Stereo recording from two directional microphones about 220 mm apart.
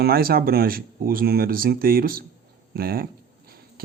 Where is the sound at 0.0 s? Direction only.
45° right (ahead or behind).